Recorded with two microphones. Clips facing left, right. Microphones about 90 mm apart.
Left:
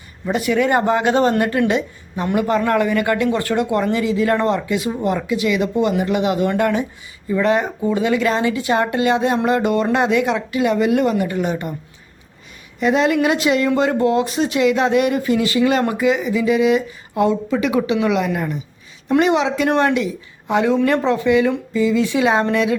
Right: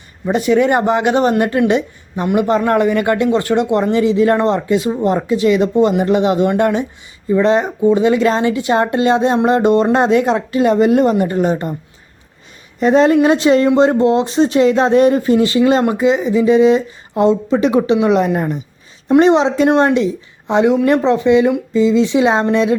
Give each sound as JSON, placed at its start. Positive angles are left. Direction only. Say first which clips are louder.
{"t": 0.3, "sound": "speech", "louder": "right 4 dB", "side_deg": -25}
{"t": 12.8, "sound": "speech", "louder": "right 5 dB", "side_deg": -35}